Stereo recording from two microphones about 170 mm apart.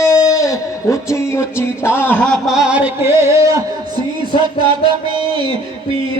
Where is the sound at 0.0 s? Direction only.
15° left (ahead or behind); by 3.3 s 15° right (ahead or behind).